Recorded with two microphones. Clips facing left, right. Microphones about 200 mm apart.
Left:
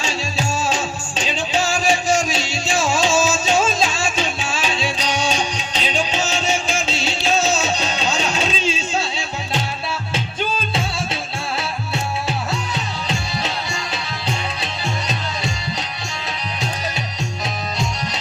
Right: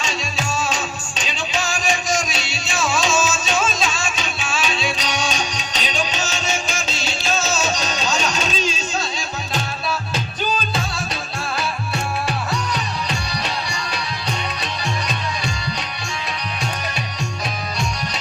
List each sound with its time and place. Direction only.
0.0 s music: 30° left (ahead or behind)
3.5 s music: 25° left (ahead or behind)
12.5 s music: 25° left (ahead or behind)